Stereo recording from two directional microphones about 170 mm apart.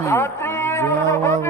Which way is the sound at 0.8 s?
15° left (ahead or behind).